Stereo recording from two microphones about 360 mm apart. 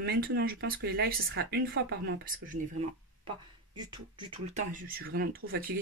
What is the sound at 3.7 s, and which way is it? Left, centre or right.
Speech, centre.